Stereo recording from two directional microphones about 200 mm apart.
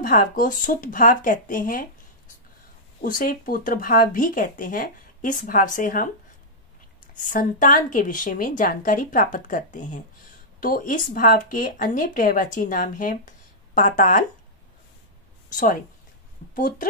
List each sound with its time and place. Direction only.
0.0 s speech: 45° left (ahead or behind)
3.0 s speech: 45° left (ahead or behind)
7.2 s speech: 40° left (ahead or behind)
15.5 s speech: 45° left (ahead or behind)